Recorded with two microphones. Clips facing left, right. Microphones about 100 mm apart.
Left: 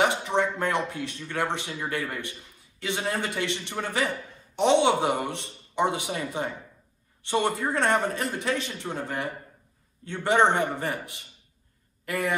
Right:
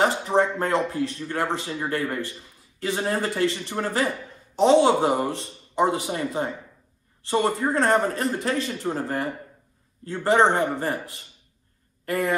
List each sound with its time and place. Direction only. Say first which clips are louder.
0.4 s speech: right 5 dB; 30° right (ahead or behind)